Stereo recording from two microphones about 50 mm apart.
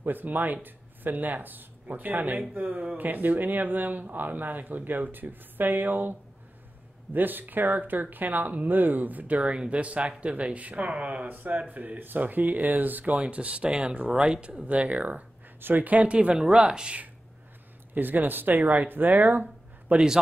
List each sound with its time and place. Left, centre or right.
0.0 s speech: right
7.2 s speech: right
9.4 s speech: right
11.7 s speech: right; by 17.0 s centre
17.9 s speech: right